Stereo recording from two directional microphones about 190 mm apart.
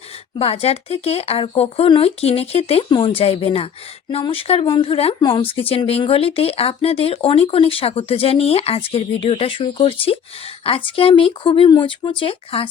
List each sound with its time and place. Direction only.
0.3 s speech: 30° left (ahead or behind)